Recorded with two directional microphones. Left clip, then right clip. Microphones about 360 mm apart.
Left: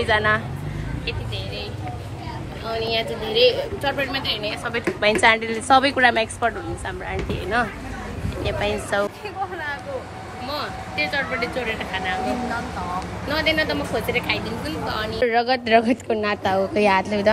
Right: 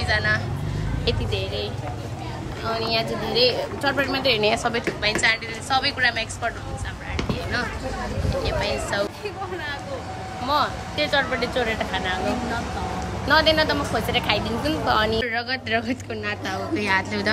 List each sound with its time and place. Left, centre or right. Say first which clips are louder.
0.0 s speech: left 3 dB; centre
3.3 s speech: left 3 dB; centre
4.7 s a woman's voice: left 3 dB; centre
8.5 s speech: left 4 dB; centre
10.4 s speech: right 6 dB; centre
13.3 s speech: right 3 dB; centre
15.2 s a woman's voice: left 6 dB; centre